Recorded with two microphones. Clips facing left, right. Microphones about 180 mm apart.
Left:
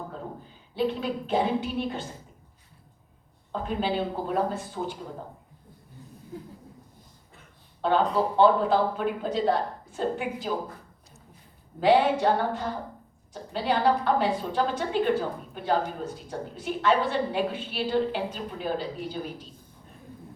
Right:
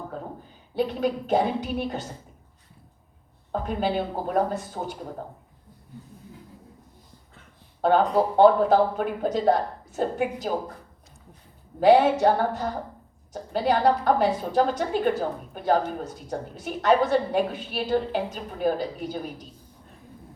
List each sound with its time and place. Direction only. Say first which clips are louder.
0.8 s a woman's voice: right 2 dB; 45° right (ahead or behind)
3.5 s a woman's voice: right 2 dB; 45° right (ahead or behind)
7.8 s a woman's voice: right 3 dB; 45° right (ahead or behind)
11.8 s a woman's voice: right 4 dB; 45° right (ahead or behind)